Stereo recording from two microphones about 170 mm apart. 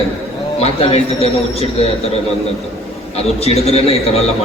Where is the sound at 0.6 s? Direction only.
35° left (ahead or behind).